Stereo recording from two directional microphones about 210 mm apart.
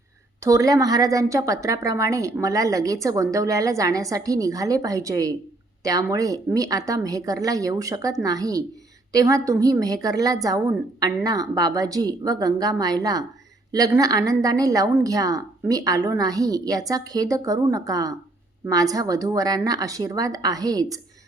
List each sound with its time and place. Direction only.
0.4 s a woman's voice: 15° right (ahead or behind)